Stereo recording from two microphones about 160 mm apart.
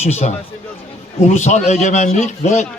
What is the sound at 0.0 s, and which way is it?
A man's voice, 45° left (ahead or behind).